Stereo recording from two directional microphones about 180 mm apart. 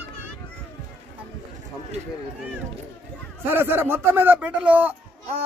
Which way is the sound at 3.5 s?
10° right (ahead or behind).